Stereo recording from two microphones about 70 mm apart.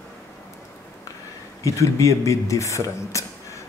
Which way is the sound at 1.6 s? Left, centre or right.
Left.